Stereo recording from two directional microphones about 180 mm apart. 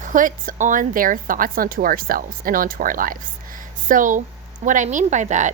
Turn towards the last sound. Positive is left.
turn(degrees=-45)  # may be behind; listen again after turning